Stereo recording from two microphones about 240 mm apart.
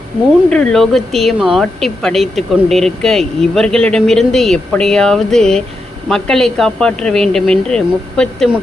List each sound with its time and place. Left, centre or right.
0.5 s a woman's voice: centre